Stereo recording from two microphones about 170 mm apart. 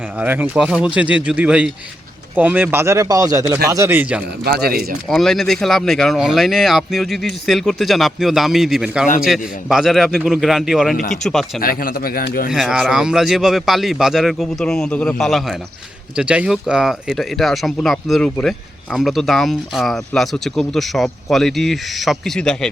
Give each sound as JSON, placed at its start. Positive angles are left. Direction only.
{"t": 0.2, "sound": "speech", "side_deg": -10}
{"t": 4.4, "sound": "speech", "side_deg": -65}
{"t": 5.0, "sound": "speech", "side_deg": 0}
{"t": 11.6, "sound": "speech", "side_deg": 60}
{"t": 12.5, "sound": "speech", "side_deg": -5}